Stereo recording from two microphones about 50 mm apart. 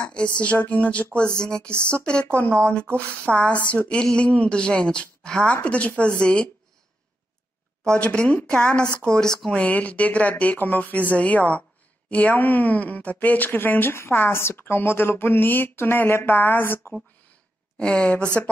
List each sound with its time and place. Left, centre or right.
0.0 s a woman's voice: left
1.4 s a sound: centre
1.7 s speech: right
2.0 s a woman's voice: centre
3.9 s a sound: centre
4.3 s a woman's voice: left
5.6 s a woman's voice: left
8.0 s a woman's voice: left
9.0 s a sound: centre
9.5 s a woman's voice: left
17.7 s a woman's voice: left